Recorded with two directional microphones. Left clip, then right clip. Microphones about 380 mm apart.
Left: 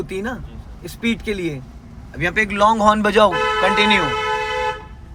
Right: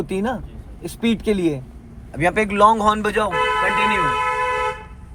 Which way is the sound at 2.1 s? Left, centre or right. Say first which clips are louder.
Right 1 dB; centre.